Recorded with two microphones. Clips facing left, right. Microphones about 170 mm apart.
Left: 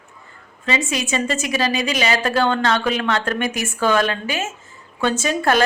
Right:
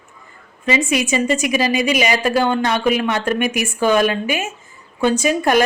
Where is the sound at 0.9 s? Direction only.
15° right (ahead or behind).